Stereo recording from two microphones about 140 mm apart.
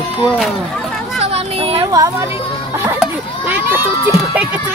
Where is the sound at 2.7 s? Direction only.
15° right (ahead or behind).